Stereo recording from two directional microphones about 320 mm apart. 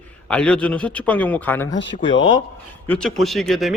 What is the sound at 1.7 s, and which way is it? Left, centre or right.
Speech, left.